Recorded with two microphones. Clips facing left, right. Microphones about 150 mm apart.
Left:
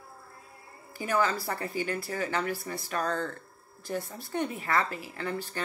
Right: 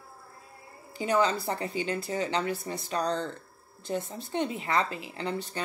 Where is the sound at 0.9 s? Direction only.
20° right (ahead or behind).